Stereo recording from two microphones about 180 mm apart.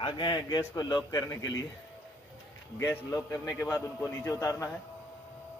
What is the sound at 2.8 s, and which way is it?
A man's voice, 15° left (ahead or behind).